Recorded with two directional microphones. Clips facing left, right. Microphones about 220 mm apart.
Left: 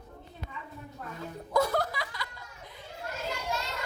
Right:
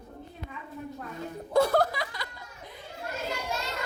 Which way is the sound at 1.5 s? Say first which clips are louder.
Right 4 dB; 30° right (ahead or behind).